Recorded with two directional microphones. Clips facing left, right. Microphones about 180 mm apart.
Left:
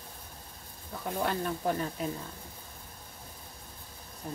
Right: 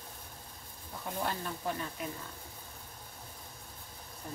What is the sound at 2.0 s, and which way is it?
Speech, 30° left (ahead or behind).